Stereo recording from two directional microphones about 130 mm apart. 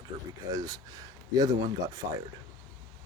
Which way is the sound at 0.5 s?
30° right (ahead or behind).